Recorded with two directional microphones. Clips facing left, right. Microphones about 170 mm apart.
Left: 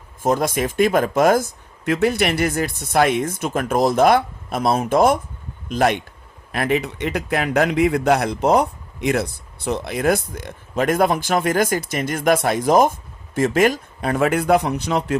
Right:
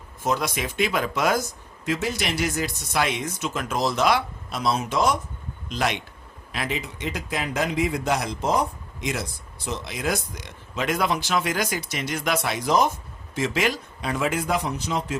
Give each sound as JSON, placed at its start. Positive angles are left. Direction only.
{"t": 0.2, "sound": "a man's voice", "side_deg": 50}